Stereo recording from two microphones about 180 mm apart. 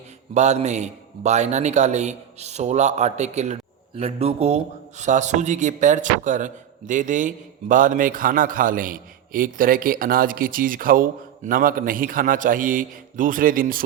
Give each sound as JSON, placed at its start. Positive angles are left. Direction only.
{"t": 0.3, "sound": "a man's voice", "side_deg": -40}